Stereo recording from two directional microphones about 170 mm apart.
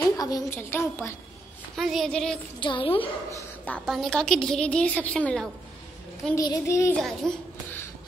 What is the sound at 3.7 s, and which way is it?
A woman's voice, centre (ahead or behind).